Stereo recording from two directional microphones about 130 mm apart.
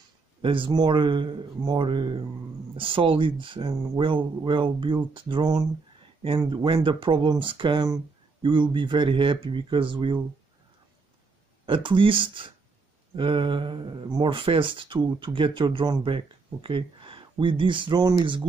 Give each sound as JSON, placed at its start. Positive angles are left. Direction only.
{"t": 0.4, "sound": "speech", "side_deg": -40}
{"t": 11.6, "sound": "speech", "side_deg": -40}